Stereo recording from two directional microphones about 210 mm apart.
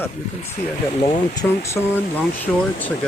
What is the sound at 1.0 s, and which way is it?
Speech, 20° left (ahead or behind).